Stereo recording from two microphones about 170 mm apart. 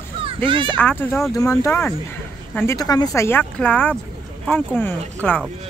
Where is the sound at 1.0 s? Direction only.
15° left (ahead or behind).